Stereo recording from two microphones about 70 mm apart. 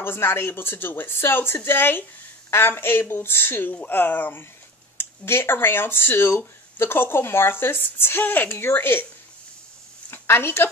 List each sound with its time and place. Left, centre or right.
0.0 s speech: left
10.1 s a woman's voice: left